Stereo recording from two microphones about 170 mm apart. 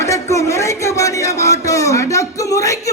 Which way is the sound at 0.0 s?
20° left (ahead or behind).